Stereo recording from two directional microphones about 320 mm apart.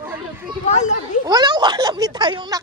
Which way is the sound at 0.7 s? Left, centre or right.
Left.